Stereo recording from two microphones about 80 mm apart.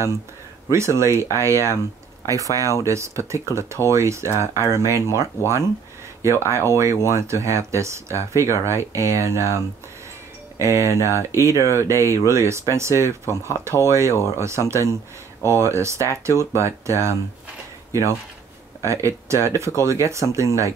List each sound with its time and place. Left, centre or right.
0.7 s speech: right
10.6 s speech: right
18.8 s speech: right